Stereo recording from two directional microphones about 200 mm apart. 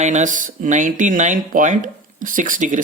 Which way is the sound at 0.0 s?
35° right (ahead or behind).